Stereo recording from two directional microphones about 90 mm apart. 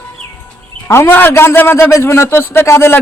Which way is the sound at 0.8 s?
30° left (ahead or behind).